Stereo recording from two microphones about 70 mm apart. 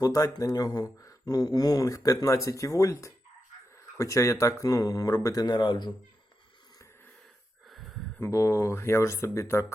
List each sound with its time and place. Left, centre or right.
0.0 s speech: left
3.9 s speech: left
7.7 s a sound: centre
8.2 s speech: left